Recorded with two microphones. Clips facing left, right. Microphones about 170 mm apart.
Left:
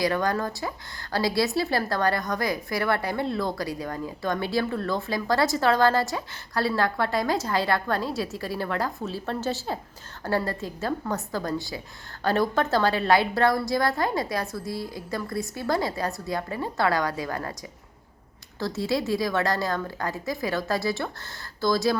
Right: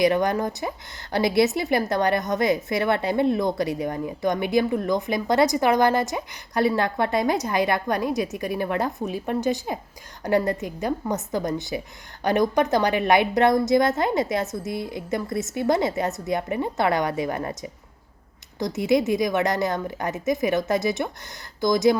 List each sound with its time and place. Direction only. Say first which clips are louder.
0.0 s speech: right 4 dB; 20° right (ahead or behind)